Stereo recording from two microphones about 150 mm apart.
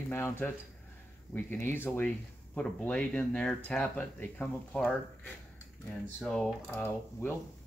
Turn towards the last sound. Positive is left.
turn(degrees=10)  # may be behind; listen again after turning